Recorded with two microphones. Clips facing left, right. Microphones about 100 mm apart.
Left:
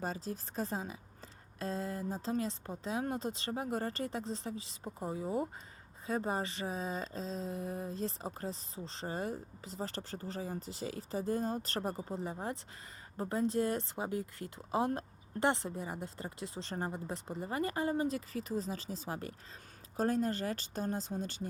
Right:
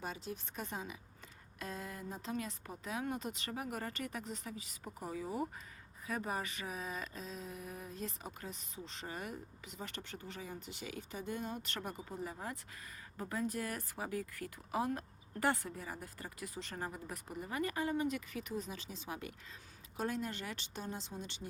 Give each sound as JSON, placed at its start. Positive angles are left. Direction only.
{"t": 0.0, "sound": "speech", "side_deg": 35}